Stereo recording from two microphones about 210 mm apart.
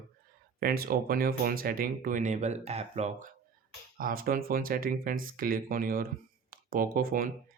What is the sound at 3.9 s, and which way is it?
Speech, 45° right (ahead or behind).